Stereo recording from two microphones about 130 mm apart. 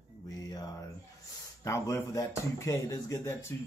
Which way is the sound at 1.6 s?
25° left (ahead or behind).